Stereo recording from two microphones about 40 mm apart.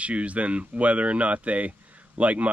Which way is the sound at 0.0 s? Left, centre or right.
Right.